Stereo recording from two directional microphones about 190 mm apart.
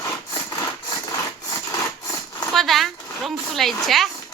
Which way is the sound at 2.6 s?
Centre (ahead or behind).